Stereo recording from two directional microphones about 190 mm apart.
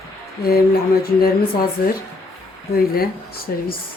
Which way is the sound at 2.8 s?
50° left (ahead or behind).